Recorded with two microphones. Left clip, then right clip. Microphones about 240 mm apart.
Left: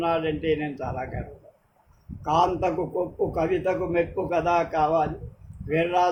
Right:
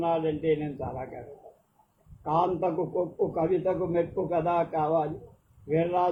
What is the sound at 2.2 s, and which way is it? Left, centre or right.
A man's voice, left.